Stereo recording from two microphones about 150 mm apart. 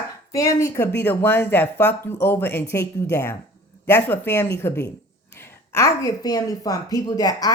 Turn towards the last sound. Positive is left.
turn(degrees=25)  # may be behind; listen again after turning